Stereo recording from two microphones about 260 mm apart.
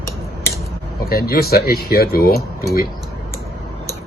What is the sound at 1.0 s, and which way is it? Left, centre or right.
Speech, left.